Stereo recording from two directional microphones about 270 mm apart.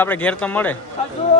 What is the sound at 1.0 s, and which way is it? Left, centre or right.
Speech, left.